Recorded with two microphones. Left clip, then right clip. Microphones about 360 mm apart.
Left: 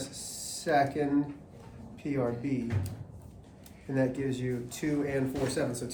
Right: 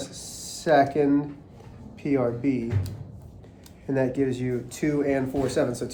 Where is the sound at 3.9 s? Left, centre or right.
Right.